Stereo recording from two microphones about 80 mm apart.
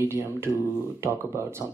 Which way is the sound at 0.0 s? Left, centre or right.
Right.